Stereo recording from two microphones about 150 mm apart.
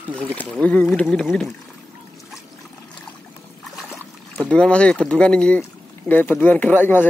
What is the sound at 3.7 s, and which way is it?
Speech, centre (ahead or behind).